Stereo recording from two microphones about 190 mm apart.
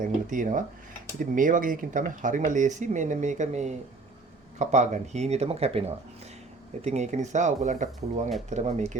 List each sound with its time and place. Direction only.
0.0 s speech: 45° right (ahead or behind)